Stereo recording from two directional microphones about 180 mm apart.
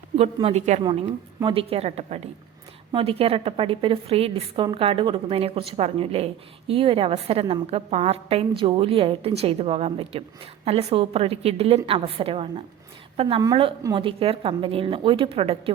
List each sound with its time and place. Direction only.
0.2 s a woman's voice: 35° right (ahead or behind)
0.9 s a woman's voice: 25° right (ahead or behind)